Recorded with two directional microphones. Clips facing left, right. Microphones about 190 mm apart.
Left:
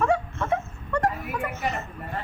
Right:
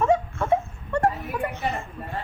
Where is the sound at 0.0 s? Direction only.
20° right (ahead or behind).